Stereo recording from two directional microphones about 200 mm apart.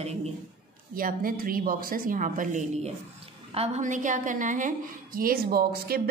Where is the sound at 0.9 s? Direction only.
45° right (ahead or behind).